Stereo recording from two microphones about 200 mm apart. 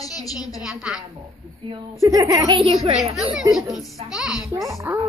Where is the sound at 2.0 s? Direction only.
15° right (ahead or behind).